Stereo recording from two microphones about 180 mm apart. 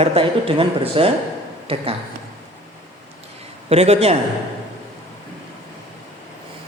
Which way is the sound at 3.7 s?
35° right (ahead or behind).